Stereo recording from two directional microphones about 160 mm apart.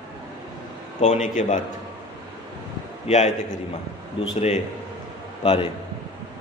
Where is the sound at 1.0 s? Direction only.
45° left (ahead or behind).